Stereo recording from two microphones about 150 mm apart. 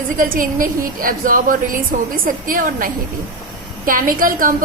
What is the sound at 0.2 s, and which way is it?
A woman's voice, 65° right (ahead or behind).